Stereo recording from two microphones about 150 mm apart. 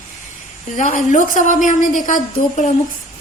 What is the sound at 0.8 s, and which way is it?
Speech, 55° left (ahead or behind).